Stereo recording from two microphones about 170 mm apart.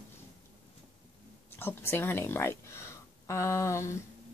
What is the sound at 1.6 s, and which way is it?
Speech, 15° left (ahead or behind).